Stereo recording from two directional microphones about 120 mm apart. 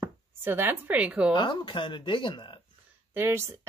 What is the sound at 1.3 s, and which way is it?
Speech, 40° left (ahead or behind).